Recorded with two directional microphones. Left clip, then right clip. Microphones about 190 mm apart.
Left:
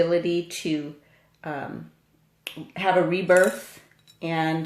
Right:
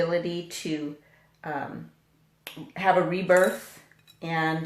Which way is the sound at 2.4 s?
45° left (ahead or behind).